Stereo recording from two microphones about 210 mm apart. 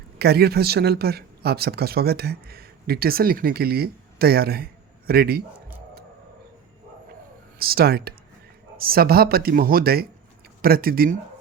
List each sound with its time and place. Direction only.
0.2 s speech: 50° right (ahead or behind)
7.6 s speech: 45° right (ahead or behind)